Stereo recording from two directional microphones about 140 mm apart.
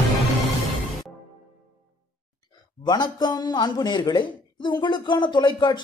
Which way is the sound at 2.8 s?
30° left (ahead or behind).